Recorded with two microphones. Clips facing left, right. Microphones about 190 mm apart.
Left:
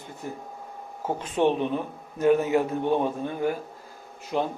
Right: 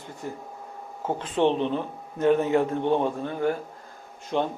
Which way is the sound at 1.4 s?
15° left (ahead or behind).